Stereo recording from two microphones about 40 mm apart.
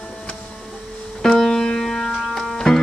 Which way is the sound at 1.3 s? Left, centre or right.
Centre.